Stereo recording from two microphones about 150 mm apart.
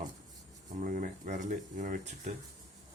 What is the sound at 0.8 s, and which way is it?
Speech, 60° right (ahead or behind).